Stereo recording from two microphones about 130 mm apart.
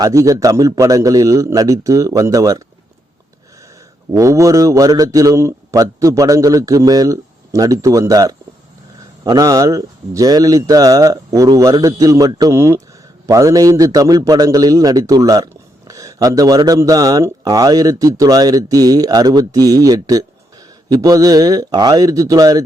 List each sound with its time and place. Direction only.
0.0 s speech: 25° right (ahead or behind)
4.1 s speech: 25° right (ahead or behind)